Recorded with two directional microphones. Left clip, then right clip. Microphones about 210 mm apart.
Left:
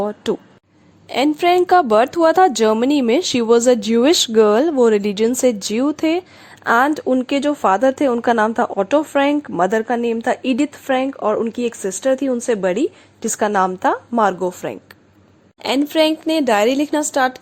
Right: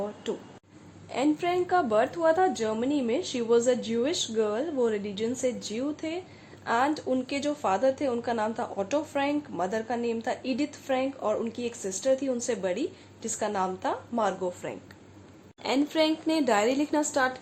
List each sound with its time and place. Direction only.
0.2 s a woman's voice: 50° left (ahead or behind)